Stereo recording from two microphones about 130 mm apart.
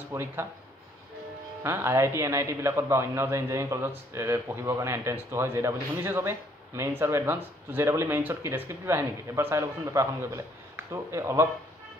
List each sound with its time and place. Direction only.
0.1 s a man's voice: 20° right (ahead or behind)
1.6 s a man's voice: 20° right (ahead or behind)